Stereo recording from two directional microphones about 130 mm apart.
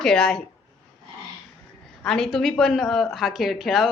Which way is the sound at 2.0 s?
5° left (ahead or behind).